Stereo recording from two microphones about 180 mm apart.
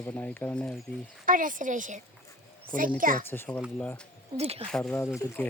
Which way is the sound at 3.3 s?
10° left (ahead or behind).